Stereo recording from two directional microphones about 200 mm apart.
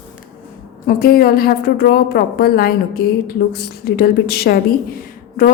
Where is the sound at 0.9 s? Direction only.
45° left (ahead or behind).